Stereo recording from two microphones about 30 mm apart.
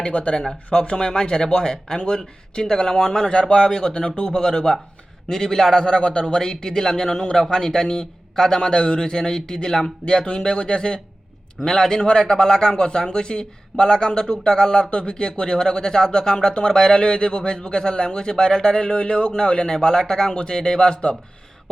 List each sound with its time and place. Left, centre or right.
0.1 s speech: left
0.9 s speech: centre
1.3 s speech: left
4.1 s speech: left
4.4 s a man's voice: left
6.0 s speech: left
6.2 s a man's voice: centre
8.7 s a man's voice: left; by 12.7 s centre
12.7 s speech: left
14.8 s speech: left
18.9 s speech: left
19.4 s speech: left